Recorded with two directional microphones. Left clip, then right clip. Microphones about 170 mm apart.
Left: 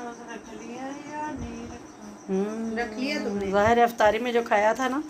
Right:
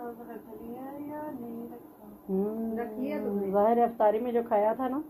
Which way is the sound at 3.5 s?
10° left (ahead or behind).